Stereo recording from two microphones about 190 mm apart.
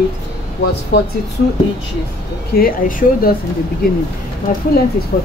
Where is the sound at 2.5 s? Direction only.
50° left (ahead or behind).